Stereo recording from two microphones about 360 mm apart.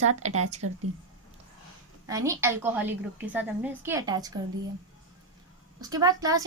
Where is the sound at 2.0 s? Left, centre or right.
Centre.